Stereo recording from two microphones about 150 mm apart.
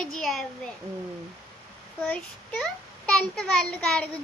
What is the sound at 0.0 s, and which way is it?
Speech, centre (ahead or behind).